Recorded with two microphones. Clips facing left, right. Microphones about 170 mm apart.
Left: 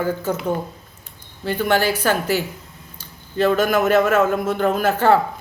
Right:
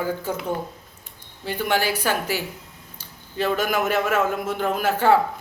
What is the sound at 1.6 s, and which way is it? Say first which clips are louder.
A man's voice: left 4 dB; 10° right (ahead or behind).